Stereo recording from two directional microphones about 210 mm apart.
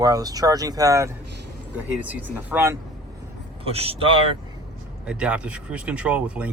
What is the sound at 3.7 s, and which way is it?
Speech, 30° right (ahead or behind).